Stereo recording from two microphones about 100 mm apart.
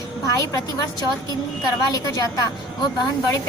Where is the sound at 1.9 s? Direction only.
40° left (ahead or behind).